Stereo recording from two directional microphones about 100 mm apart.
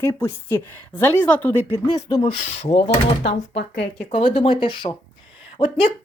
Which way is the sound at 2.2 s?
80° left.